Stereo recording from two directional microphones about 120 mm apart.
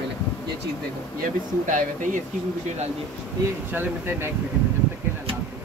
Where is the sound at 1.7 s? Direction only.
90° right.